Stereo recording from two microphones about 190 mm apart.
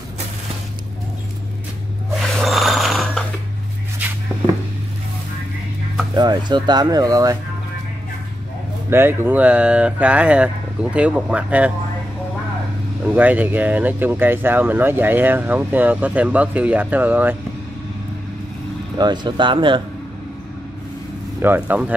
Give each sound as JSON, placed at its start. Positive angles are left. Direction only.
{"t": 2.1, "sound": "snoring", "side_deg": 0}
{"t": 6.1, "sound": "speech", "side_deg": -25}
{"t": 8.9, "sound": "speech", "side_deg": -10}
{"t": 13.1, "sound": "speech", "side_deg": -10}
{"t": 18.9, "sound": "speech", "side_deg": -25}
{"t": 21.4, "sound": "speech", "side_deg": -10}